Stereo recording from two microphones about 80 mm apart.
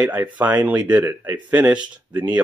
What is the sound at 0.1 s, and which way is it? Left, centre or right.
Speech, right.